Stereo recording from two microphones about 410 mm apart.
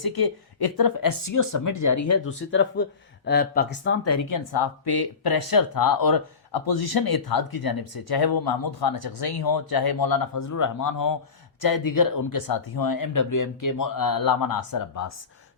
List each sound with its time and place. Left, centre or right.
0.0 s speech: left